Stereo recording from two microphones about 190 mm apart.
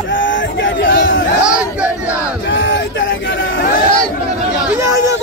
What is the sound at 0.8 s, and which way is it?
Chatter, 60° left (ahead or behind).